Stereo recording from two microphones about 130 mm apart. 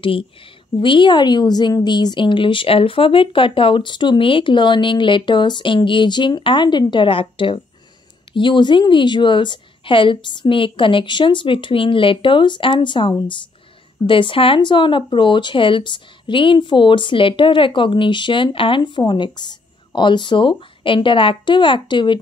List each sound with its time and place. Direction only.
0.0 s speech: 45° left (ahead or behind)